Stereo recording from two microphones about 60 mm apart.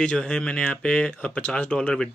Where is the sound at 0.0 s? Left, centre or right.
Centre.